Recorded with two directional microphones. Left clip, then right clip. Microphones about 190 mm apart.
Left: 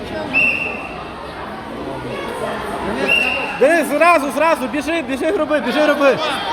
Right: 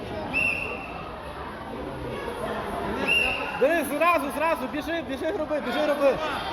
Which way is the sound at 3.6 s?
30° left (ahead or behind).